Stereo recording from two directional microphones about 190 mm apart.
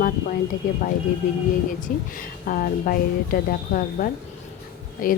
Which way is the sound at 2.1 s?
45° left (ahead or behind).